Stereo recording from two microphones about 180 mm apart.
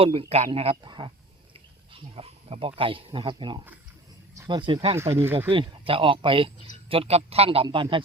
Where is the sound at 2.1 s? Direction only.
30° right (ahead or behind).